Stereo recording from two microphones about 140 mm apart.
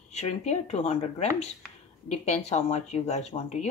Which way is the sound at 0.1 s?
50° left (ahead or behind).